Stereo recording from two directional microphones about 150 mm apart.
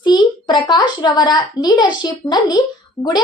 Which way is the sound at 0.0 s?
30° left (ahead or behind).